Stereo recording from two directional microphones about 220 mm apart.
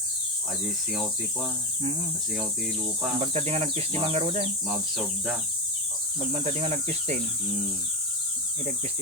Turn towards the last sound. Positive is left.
turn(degrees=-30)  # may be behind; listen again after turning